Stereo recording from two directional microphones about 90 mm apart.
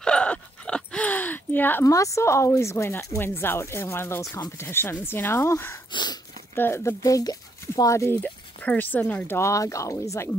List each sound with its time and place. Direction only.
0.0 s gasp: 10° left (ahead or behind)
1.9 s speech: 35° left (ahead or behind)
5.9 s dog: 55° left (ahead or behind)
6.5 s speech: 25° left (ahead or behind)
8.2 s a sound: 15° left (ahead or behind)
9.4 s speech: 35° left (ahead or behind)